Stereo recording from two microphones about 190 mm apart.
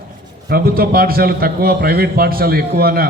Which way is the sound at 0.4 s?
50° right (ahead or behind).